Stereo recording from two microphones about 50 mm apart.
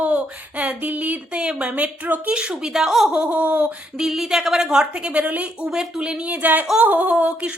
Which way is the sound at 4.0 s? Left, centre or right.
Centre.